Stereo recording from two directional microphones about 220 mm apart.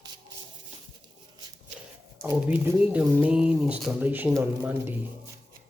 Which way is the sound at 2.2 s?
10° right (ahead or behind).